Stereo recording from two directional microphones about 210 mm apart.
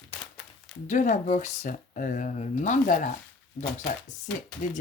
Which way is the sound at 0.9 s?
35° left (ahead or behind).